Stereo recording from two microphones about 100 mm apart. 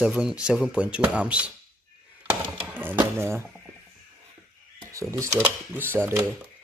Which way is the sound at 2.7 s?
20° right (ahead or behind).